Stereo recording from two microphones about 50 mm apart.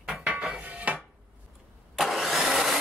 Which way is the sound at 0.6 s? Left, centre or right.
Right.